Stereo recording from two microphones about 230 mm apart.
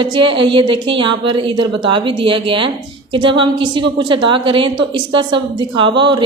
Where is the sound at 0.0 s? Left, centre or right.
Right.